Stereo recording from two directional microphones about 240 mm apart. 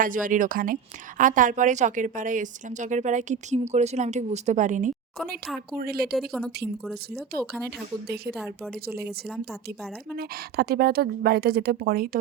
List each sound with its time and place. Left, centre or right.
0.0 s a woman's voice: right
6.1 s a woman's voice: centre
8.0 s a woman's voice: right
8.3 s a woman's voice: centre
10.2 s a woman's voice: right